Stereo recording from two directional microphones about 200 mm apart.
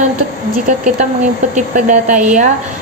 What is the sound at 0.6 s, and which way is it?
A woman's voice, 35° right (ahead or behind).